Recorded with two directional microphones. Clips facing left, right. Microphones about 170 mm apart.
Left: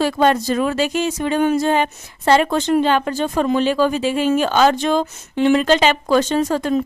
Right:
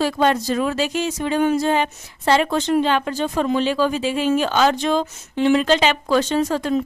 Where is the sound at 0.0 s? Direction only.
50° left (ahead or behind).